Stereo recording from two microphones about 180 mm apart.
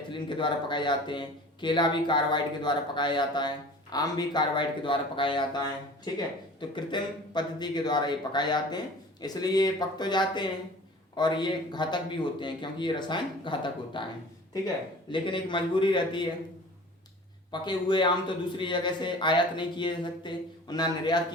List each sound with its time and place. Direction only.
0.1 s speech: 25° left (ahead or behind)
15.1 s speech: 25° left (ahead or behind)
17.5 s speech: 25° left (ahead or behind)